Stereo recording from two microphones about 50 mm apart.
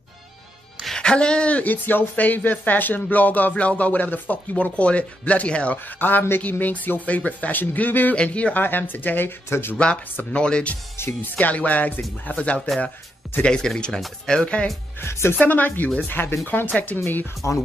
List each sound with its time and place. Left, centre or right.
0.9 s speech: centre
5.9 s speech: left
8.2 s speech: left
8.5 s speech: left
9.5 s speech: left
10.3 s speech: left
11.0 s speech: left
11.3 s speech: left
12.5 s speech: centre
13.4 s speech: centre
15.0 s speech: left
15.3 s speech: left
16.1 s speech: left
17.4 s speech: left